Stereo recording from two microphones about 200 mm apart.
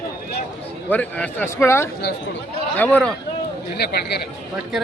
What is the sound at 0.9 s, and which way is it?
A man's voice, 10° left (ahead or behind).